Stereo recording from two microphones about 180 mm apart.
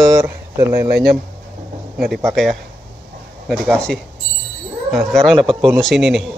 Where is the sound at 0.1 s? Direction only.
15° right (ahead or behind).